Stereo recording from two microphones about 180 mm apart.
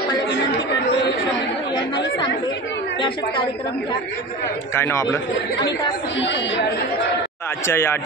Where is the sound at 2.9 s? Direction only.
25° left (ahead or behind).